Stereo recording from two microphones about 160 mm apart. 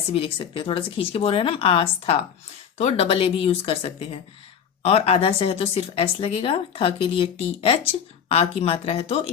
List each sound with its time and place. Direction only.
0.1 s speech: 35° left (ahead or behind)